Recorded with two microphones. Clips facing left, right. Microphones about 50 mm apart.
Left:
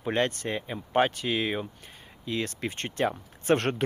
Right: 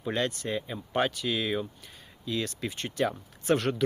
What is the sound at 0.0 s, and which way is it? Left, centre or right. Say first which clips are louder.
Speech: left 3 dB; left.